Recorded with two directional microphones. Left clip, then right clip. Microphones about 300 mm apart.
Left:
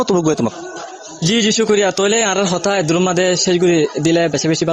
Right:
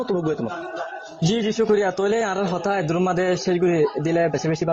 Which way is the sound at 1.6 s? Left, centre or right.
Left.